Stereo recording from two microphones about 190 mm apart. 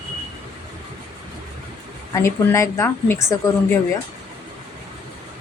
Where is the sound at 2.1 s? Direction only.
15° left (ahead or behind).